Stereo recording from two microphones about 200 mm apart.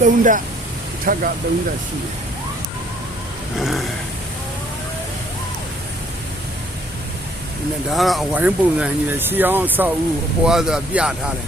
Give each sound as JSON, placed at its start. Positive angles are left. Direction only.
{"t": 0.0, "sound": "speech", "side_deg": -40}
{"t": 3.6, "sound": "speech", "side_deg": 0}
{"t": 7.9, "sound": "speech", "side_deg": 0}